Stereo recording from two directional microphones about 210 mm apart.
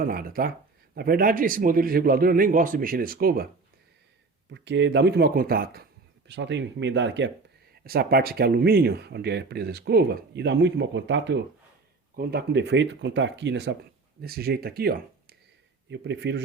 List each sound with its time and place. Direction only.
0.0 s speech: 45° right (ahead or behind)
4.5 s speech: 55° right (ahead or behind)
6.2 s speech: 55° right (ahead or behind)
7.9 s speech: 45° right (ahead or behind)
14.2 s speech: 45° right (ahead or behind)